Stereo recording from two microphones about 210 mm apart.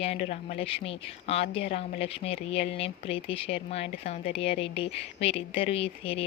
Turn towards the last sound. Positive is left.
turn(degrees=25)  # may be behind; listen again after turning